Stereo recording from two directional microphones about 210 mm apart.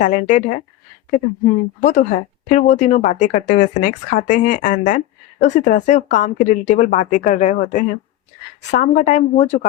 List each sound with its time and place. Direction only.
0.0 s a woman's voice: 35° left (ahead or behind)
1.8 s a woman's voice: 35° left (ahead or behind)